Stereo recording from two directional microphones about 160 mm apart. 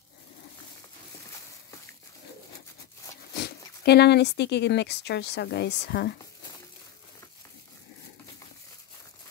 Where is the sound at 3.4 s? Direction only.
90° left.